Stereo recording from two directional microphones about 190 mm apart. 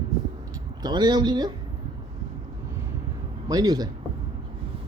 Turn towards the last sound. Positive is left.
turn(degrees=-20)  # may be behind; listen again after turning